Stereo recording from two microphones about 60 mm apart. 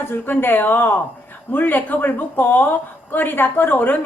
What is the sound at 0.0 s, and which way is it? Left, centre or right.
A woman's voice, left.